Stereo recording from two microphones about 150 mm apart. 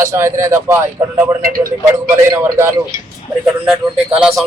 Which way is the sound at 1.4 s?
70° right (ahead or behind).